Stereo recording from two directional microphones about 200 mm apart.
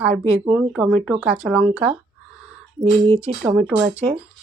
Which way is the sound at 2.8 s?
25° right (ahead or behind).